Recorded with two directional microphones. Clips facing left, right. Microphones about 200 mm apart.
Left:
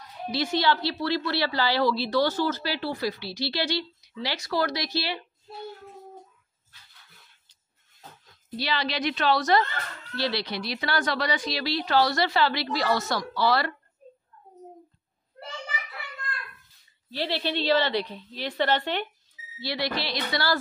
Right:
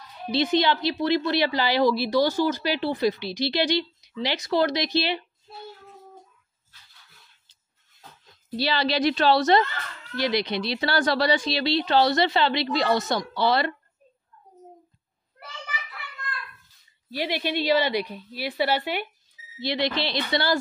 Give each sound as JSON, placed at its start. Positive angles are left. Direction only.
{"t": 0.3, "sound": "a woman's voice", "side_deg": -20}
{"t": 8.5, "sound": "a woman's voice", "side_deg": -30}
{"t": 10.1, "sound": "a woman's voice", "side_deg": -15}
{"t": 17.1, "sound": "a woman's voice", "side_deg": -15}
{"t": 19.6, "sound": "a woman's voice", "side_deg": -20}